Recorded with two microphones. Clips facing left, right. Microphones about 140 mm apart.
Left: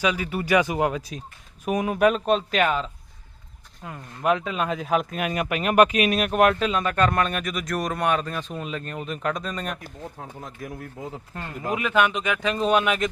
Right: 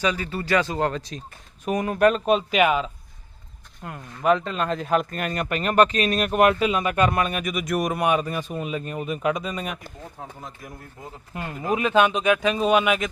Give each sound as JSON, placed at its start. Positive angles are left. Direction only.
{"t": 0.0, "sound": "speech", "side_deg": 5}
{"t": 4.2, "sound": "speech", "side_deg": 5}
{"t": 11.3, "sound": "speech", "side_deg": -20}